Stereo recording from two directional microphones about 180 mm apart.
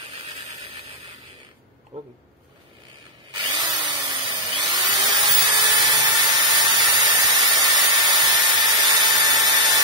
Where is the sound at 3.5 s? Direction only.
25° right (ahead or behind).